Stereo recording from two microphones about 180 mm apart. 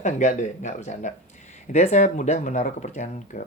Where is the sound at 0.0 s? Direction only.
40° left (ahead or behind).